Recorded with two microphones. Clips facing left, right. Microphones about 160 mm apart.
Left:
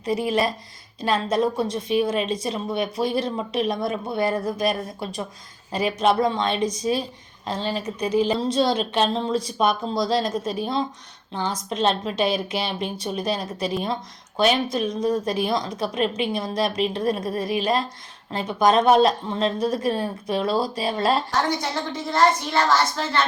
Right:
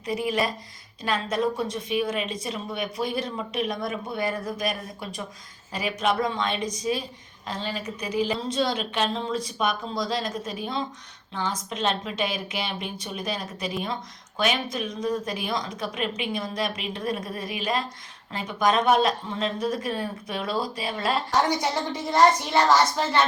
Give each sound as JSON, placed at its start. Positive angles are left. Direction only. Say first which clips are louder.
{"t": 0.0, "sound": "a woman's voice", "louder": "left 4 dB", "side_deg": 30}
{"t": 21.6, "sound": "a woman's voice", "louder": "even", "side_deg": -15}